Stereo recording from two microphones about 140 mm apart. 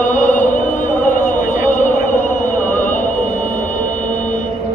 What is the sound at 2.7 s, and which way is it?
Sonar, 65° left (ahead or behind).